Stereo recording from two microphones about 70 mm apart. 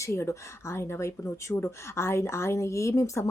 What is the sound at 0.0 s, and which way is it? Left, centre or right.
Speech, left.